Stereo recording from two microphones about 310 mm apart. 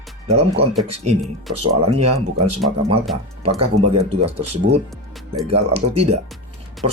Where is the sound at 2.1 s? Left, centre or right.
Centre.